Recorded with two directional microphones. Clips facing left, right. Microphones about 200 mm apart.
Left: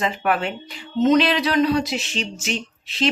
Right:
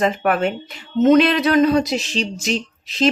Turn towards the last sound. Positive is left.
turn(degrees=-40)  # may be behind; listen again after turning